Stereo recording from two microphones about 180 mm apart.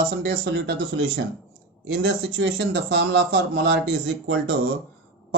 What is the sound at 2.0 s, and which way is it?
A man's voice, 90° right.